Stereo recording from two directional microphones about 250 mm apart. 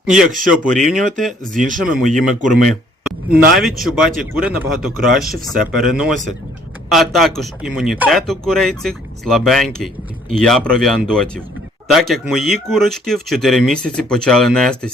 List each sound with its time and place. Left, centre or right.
0.0 s a man's voice: centre
1.5 s speech: right
1.8 s a man's voice: centre